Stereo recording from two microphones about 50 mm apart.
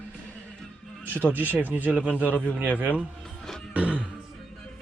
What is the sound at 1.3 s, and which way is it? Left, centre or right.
Speech, right.